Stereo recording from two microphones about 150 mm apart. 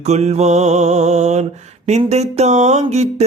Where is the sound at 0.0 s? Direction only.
45° right (ahead or behind).